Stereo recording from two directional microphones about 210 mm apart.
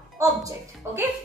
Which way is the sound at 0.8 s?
10° right (ahead or behind).